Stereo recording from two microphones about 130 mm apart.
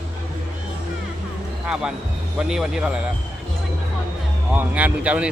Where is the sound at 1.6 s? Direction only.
5° right (ahead or behind).